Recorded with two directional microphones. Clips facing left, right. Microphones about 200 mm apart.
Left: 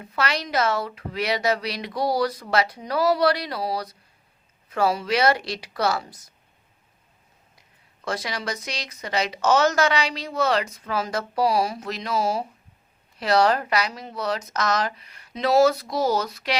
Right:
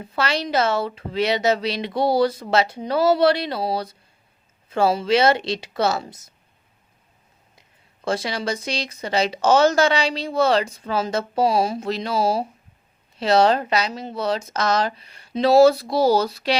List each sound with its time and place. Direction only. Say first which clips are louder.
0.0 s speech: right 3 dB; 30° right (ahead or behind)
8.0 s speech: right 5 dB; 30° right (ahead or behind)